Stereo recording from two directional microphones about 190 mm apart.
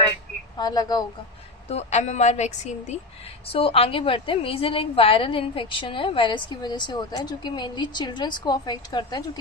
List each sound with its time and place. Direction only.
0.5 s a woman's voice: 20° left (ahead or behind)
1.7 s a woman's voice: 35° left (ahead or behind)